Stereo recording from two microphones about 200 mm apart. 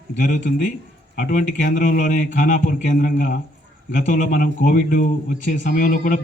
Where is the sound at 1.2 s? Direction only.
40° left (ahead or behind).